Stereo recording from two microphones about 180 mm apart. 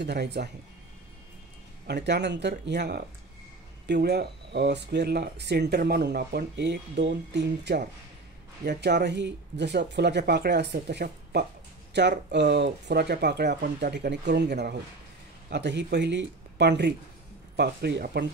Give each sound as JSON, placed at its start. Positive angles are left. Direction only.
{"t": 0.0, "sound": "speech", "side_deg": -65}
{"t": 1.9, "sound": "speech", "side_deg": -70}